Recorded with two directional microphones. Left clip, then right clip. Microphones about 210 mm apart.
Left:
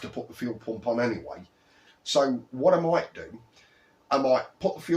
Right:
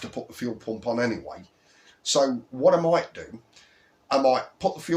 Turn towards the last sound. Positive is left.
turn(degrees=-40)  # may be behind; listen again after turning